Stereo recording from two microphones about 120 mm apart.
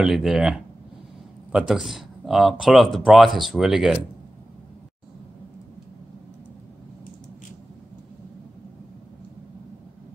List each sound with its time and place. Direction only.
0.0 s speech: 5° right (ahead or behind)